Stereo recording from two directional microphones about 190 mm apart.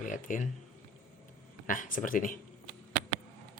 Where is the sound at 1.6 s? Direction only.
45° left (ahead or behind).